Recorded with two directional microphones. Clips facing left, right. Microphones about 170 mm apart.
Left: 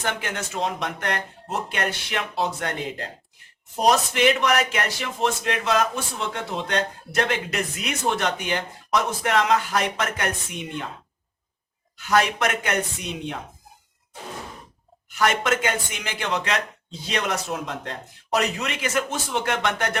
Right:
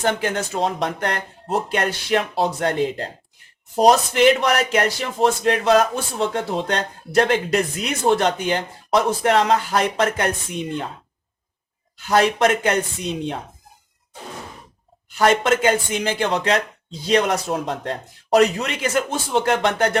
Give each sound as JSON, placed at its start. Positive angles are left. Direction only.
{"t": 0.0, "sound": "speech", "side_deg": -35}
{"t": 11.9, "sound": "speech", "side_deg": -30}
{"t": 15.2, "sound": "speech", "side_deg": -30}